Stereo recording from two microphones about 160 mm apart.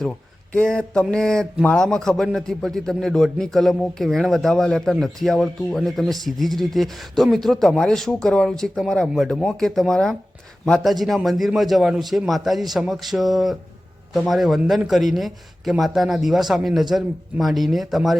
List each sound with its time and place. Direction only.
0.5 s a man's voice: 5° left (ahead or behind)